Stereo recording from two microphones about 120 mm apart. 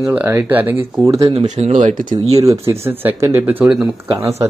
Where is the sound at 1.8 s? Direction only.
90° right.